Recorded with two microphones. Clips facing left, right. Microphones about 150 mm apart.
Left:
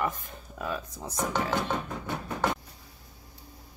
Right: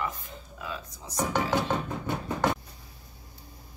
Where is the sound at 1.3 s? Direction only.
10° right (ahead or behind).